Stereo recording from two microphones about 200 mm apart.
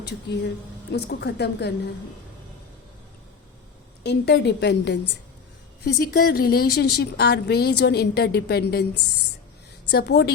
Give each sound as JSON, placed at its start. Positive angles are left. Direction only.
{"t": 0.9, "sound": "a woman's voice", "side_deg": 55}
{"t": 4.0, "sound": "a woman's voice", "side_deg": 55}
{"t": 9.9, "sound": "a woman's voice", "side_deg": 55}